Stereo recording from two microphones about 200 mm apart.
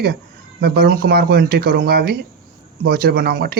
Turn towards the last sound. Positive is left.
turn(degrees=-50)  # may be behind; listen again after turning